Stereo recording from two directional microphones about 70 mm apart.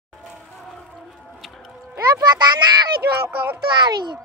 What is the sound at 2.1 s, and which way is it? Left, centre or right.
Speech, right.